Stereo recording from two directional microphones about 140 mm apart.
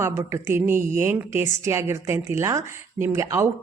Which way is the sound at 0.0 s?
20° right (ahead or behind).